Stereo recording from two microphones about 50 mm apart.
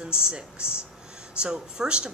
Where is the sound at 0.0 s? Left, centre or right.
Centre.